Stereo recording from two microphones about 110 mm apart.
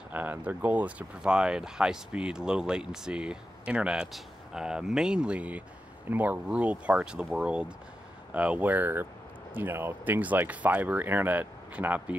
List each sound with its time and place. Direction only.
0.1 s speech: 15° right (ahead or behind)